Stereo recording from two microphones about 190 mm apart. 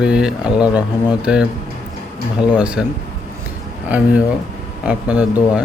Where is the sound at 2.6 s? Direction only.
5° right (ahead or behind).